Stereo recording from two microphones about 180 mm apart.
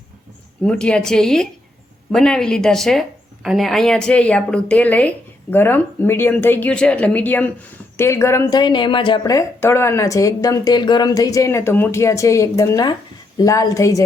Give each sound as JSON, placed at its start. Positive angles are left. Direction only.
{"t": 0.6, "sound": "a woman's voice", "side_deg": 5}